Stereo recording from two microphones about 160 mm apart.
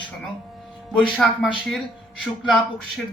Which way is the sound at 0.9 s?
5° left (ahead or behind).